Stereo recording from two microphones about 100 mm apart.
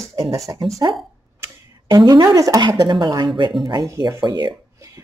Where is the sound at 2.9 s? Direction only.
45° right (ahead or behind).